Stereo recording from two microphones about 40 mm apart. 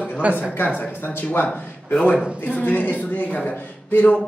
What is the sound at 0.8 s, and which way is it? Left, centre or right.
Speech, left.